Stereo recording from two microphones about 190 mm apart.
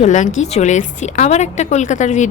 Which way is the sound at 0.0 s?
40° left (ahead or behind).